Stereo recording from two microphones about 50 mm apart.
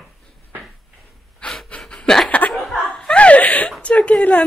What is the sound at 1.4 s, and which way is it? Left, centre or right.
Pant, left.